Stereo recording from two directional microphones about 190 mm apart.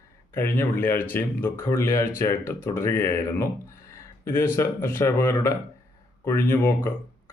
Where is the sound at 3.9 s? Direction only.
15° left (ahead or behind).